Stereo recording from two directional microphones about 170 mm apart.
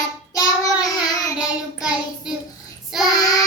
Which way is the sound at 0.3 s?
20° left (ahead or behind).